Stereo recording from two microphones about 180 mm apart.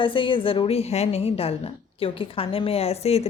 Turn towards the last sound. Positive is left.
turn(degrees=35)  # may be behind; listen again after turning